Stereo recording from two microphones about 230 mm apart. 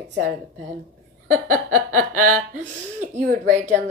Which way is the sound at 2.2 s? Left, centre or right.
Right.